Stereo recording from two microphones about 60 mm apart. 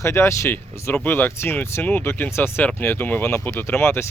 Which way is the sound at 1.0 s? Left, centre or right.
Left.